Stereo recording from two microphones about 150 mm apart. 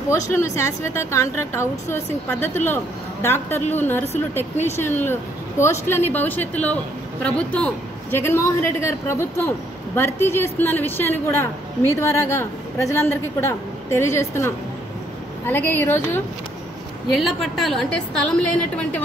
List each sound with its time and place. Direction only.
0.1 s a woman's voice: 15° left (ahead or behind)
17.1 s a woman's voice: centre (ahead or behind)